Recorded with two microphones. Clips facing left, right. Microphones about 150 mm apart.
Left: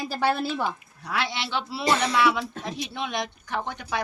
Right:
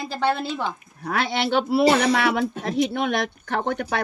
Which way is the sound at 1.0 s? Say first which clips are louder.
Right 6 dB; 50° right (ahead or behind).